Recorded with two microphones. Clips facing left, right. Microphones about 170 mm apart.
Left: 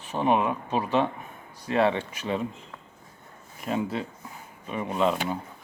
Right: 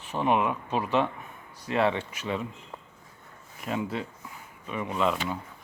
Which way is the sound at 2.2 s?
30° left (ahead or behind).